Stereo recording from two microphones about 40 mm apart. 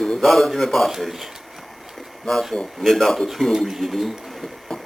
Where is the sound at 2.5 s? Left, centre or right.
Centre.